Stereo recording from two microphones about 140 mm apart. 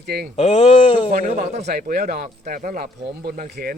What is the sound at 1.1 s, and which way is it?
Speech, 70° right (ahead or behind).